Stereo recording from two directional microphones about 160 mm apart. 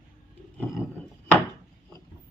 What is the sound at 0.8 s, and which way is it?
Chopping, 15° left (ahead or behind).